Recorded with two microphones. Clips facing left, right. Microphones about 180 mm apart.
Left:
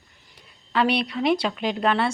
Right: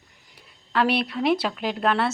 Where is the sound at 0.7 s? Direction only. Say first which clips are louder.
Even; centre (ahead or behind).